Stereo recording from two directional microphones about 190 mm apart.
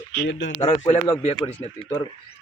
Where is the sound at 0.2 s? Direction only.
75° left (ahead or behind).